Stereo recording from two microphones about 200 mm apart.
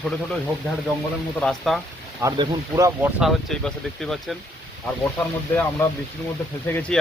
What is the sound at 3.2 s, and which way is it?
Speech, centre (ahead or behind).